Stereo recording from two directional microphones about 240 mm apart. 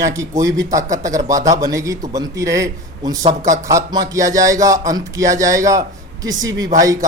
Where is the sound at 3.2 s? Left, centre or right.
Right.